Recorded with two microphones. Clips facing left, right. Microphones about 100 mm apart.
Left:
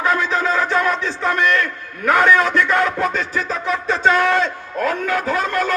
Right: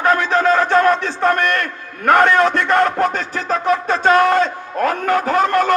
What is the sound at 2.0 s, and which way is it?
Speech, 60° right (ahead or behind).